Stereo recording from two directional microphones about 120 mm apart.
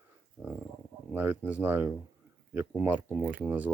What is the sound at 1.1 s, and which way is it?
Speech, 15° right (ahead or behind).